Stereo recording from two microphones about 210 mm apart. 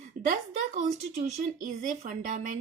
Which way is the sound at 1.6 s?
35° right (ahead or behind).